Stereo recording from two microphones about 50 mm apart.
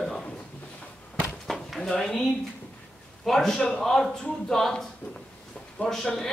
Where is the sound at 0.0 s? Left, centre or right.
Centre.